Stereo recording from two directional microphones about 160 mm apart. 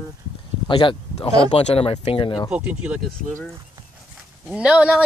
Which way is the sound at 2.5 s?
10° right (ahead or behind).